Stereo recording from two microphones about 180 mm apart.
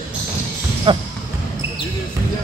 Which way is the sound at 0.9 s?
25° right (ahead or behind).